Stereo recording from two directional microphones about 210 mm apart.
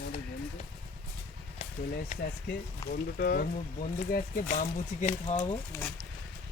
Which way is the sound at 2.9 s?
45° left (ahead or behind).